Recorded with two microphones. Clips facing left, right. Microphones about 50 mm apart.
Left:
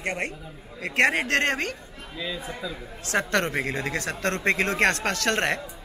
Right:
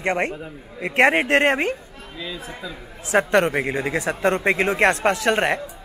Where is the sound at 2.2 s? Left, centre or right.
Centre.